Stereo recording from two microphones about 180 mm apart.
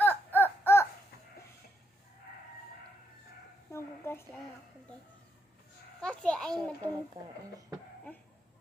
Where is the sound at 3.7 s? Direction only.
15° left (ahead or behind).